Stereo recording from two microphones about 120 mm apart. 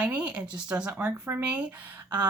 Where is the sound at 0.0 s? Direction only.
10° right (ahead or behind).